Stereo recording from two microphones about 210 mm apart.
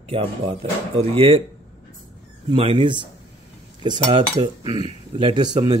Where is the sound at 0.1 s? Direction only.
25° right (ahead or behind).